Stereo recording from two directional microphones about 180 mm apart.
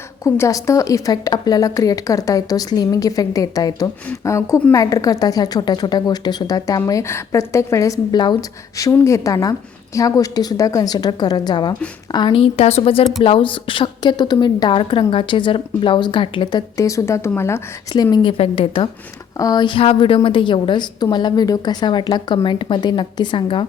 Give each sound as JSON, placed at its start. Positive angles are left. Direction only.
{"t": 0.3, "sound": "a woman's voice", "side_deg": 15}